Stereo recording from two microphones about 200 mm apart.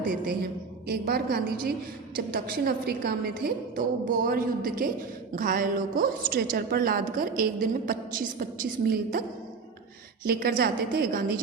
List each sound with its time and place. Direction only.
0.0 s a woman's voice: 45° right (ahead or behind)
10.6 s a woman's voice: 50° right (ahead or behind)